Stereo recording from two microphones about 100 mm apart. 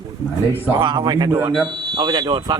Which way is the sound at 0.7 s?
50° right (ahead or behind).